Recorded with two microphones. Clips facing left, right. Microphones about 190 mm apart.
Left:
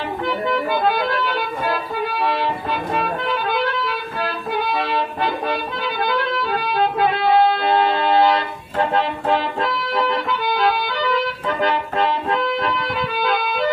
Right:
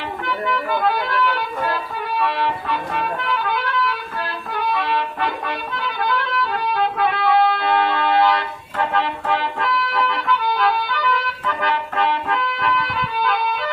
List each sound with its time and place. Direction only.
0.3 s music: 35° left (ahead or behind)
6.7 s music: 30° left (ahead or behind)
11.4 s music: 35° left (ahead or behind)